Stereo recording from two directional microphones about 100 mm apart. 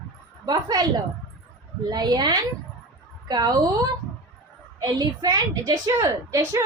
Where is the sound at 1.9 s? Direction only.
45° right (ahead or behind).